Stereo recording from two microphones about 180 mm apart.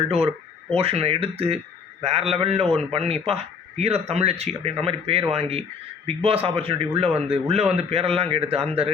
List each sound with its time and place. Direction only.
0.0 s speech: 30° right (ahead or behind)